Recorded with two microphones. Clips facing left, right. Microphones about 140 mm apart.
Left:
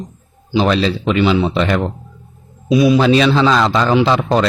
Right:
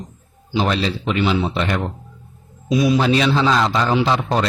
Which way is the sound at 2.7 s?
75° left (ahead or behind).